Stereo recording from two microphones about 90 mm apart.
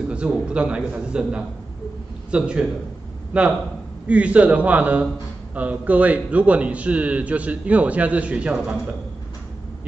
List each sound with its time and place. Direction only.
0.1 s a man's voice: 10° right (ahead or behind)